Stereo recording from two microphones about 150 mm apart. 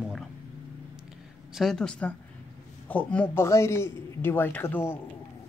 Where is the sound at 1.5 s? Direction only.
Centre (ahead or behind).